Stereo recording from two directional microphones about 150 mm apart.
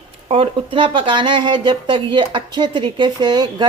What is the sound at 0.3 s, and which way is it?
Speech, 35° right (ahead or behind).